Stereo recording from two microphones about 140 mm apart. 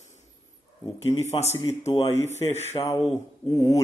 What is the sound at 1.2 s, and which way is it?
Speech, 50° left (ahead or behind).